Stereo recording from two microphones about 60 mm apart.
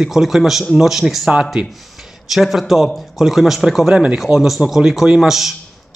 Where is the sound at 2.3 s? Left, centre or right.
Centre.